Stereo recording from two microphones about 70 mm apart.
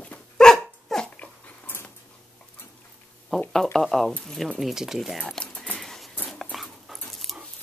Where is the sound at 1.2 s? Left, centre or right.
Left.